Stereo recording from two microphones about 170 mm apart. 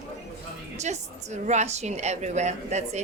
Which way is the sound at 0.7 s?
40° right (ahead or behind).